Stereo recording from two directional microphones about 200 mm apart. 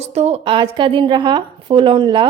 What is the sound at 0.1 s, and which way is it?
A woman's voice, 30° right (ahead or behind).